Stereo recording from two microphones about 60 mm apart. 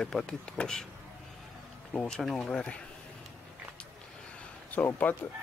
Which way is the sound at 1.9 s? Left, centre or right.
Centre.